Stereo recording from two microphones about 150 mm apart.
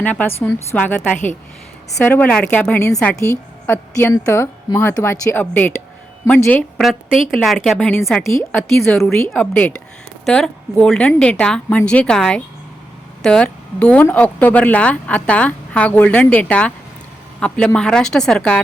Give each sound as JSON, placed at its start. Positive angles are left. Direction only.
{"t": 0.0, "sound": "a woman's voice", "side_deg": 10}